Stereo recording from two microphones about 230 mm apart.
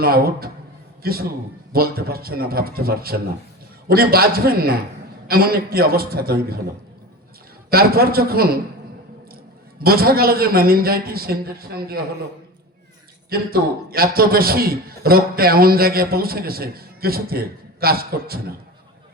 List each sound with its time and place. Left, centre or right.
0.0 s a man's voice: right
7.7 s a man's voice: right
13.3 s a man's voice: right